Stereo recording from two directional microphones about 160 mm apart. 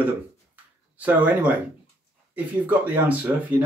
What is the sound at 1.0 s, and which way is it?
Speech, 10° right (ahead or behind).